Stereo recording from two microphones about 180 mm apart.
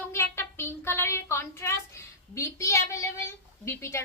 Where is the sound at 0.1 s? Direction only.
15° left (ahead or behind).